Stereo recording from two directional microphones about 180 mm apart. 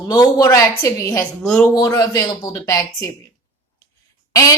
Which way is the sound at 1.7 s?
20° left (ahead or behind).